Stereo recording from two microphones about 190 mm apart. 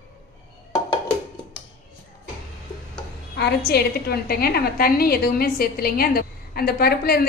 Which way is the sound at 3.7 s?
55° left (ahead or behind).